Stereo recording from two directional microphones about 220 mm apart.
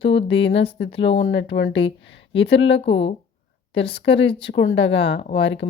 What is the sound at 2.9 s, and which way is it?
Speech, 25° left (ahead or behind).